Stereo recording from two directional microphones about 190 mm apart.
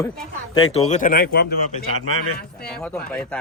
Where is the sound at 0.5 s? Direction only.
35° left (ahead or behind); by 1.6 s 55° left (ahead or behind).